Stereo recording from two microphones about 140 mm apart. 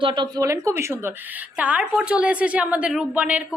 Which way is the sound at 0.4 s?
20° right (ahead or behind).